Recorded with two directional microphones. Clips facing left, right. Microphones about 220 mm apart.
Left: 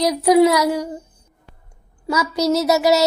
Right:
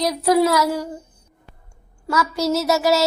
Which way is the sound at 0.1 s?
15° left (ahead or behind).